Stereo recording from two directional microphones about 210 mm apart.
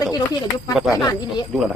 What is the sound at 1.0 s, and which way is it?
Speech, 20° left (ahead or behind).